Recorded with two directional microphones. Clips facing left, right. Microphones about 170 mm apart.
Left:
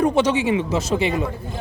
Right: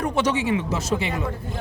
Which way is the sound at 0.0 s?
25° left (ahead or behind).